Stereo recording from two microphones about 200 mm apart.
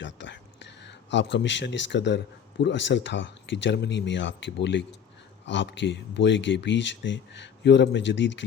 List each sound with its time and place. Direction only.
0.0 s a man's voice: 65° left (ahead or behind)